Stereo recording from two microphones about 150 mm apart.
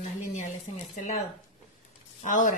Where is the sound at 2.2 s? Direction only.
60° left (ahead or behind).